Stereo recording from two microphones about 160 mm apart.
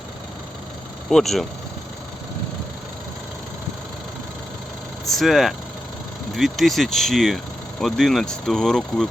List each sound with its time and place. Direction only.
1.1 s speech: centre (ahead or behind)
5.0 s speech: centre (ahead or behind)